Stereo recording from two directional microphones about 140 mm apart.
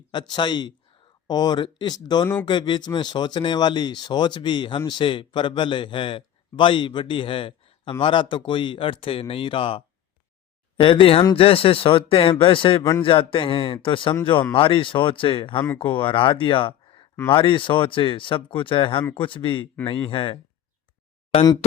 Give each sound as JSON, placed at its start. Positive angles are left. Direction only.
{"t": 0.1, "sound": "a man's voice", "side_deg": 30}